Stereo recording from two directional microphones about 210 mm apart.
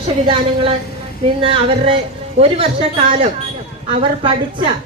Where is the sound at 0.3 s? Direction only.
25° right (ahead or behind).